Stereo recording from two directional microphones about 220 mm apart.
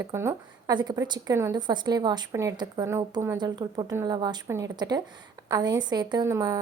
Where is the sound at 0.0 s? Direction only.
10° right (ahead or behind).